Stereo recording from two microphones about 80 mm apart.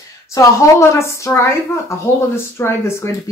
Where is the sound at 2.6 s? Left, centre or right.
Left.